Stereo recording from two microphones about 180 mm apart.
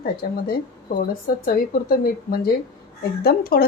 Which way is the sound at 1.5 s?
55° left (ahead or behind).